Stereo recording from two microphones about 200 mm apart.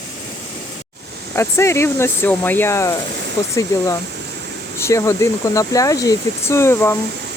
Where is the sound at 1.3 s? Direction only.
15° left (ahead or behind).